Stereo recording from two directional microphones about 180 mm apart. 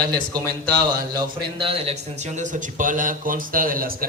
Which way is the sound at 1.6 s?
35° right (ahead or behind).